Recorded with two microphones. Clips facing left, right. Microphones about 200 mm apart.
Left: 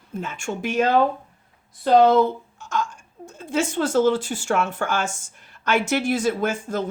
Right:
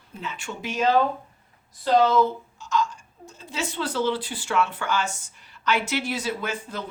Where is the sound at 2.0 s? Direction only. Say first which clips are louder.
Left 4 dB; 55° left (ahead or behind).